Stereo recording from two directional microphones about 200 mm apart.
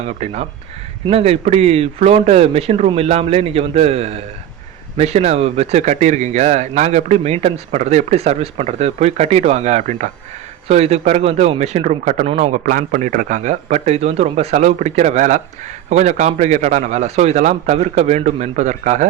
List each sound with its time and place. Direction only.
0.0 s speech: 35° right (ahead or behind)